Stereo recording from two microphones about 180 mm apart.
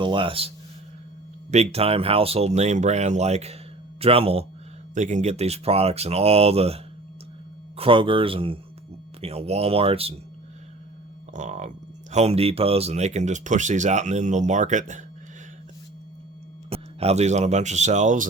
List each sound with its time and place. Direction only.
0.0 s speech: 25° right (ahead or behind)
11.3 s speech: 40° right (ahead or behind)
16.6 s speech: 35° right (ahead or behind)